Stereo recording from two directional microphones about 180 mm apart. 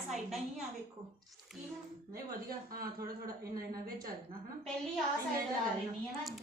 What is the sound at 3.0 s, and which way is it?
Speech, 20° right (ahead or behind).